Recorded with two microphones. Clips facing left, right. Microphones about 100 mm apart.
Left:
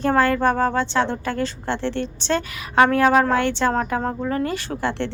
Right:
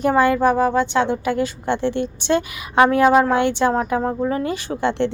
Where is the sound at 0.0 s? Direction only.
15° right (ahead or behind).